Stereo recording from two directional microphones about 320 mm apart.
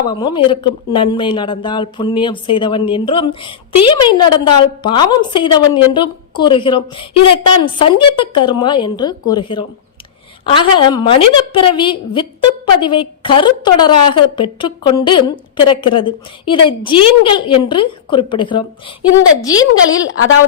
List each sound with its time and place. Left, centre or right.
0.1 s speech: centre
20.1 s a woman's voice: left